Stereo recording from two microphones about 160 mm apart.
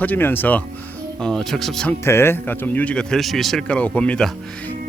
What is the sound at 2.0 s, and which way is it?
A man's voice, 15° left (ahead or behind).